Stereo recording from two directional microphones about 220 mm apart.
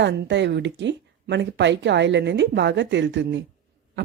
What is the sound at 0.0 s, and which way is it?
Speech, 55° right (ahead or behind).